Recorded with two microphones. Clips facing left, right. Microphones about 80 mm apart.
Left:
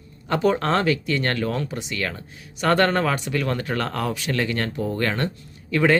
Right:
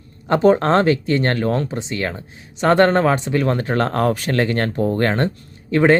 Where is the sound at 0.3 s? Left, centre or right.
Right.